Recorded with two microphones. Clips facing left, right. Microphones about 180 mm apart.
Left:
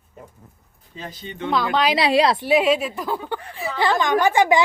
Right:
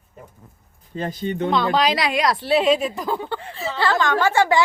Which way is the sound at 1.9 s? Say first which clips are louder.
Left 3 dB; 30° left (ahead or behind).